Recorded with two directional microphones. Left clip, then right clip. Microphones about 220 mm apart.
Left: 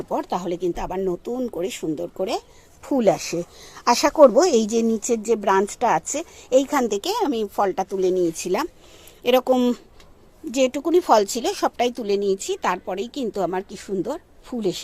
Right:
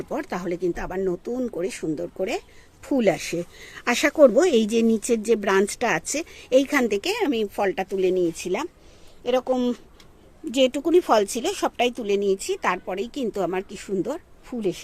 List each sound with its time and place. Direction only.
0.1 s a woman's voice: centre (ahead or behind)
9.2 s speech: 30° left (ahead or behind)
10.5 s speech: centre (ahead or behind)
12.2 s a woman's voice: 20° right (ahead or behind)
12.6 s speech: 5° left (ahead or behind)